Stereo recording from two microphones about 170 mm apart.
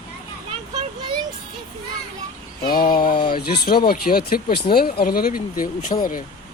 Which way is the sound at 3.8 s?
60° left (ahead or behind).